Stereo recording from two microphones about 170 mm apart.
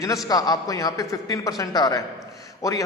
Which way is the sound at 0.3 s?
20° left (ahead or behind).